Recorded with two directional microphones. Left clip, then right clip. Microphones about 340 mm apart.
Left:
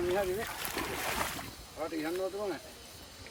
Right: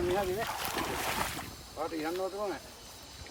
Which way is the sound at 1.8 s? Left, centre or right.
Centre.